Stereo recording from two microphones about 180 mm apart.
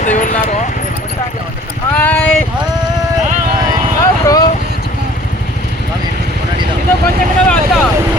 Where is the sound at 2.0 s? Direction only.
10° left (ahead or behind).